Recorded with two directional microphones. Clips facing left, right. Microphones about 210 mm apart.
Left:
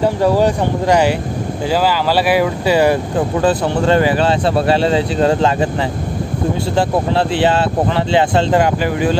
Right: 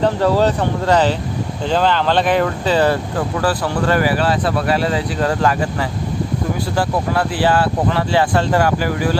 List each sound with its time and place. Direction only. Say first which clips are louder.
0.0 s speech: left 2 dB; 15° left (ahead or behind)
6.7 s speech: left 3 dB; 25° left (ahead or behind)